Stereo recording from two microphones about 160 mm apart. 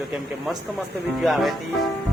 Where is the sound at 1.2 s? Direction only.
Centre (ahead or behind).